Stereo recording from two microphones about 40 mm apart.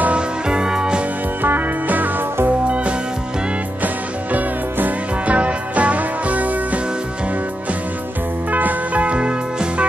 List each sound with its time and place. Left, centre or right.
0.1 s music: right
1.4 s music: right
3.8 s music: right
5.3 s music: right
8.5 s music: right